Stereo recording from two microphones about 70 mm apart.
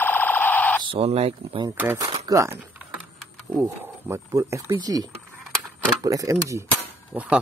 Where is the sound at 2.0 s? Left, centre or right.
Right.